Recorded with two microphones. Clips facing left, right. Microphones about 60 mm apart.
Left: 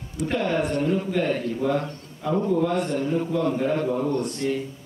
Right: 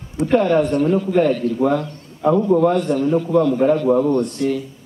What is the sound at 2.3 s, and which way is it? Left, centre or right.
Speech, right.